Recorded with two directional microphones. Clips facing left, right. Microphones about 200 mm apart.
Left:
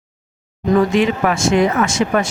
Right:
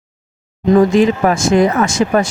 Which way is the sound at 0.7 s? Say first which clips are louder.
Right 4 dB; 40° right (ahead or behind).